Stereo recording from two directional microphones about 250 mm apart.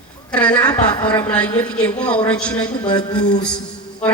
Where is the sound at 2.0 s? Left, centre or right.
Centre.